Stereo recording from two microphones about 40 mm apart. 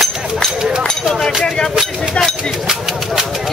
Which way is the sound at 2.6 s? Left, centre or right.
Centre.